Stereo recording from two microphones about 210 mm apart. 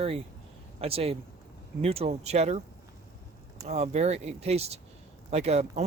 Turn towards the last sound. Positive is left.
turn(degrees=-30)  # may be behind; listen again after turning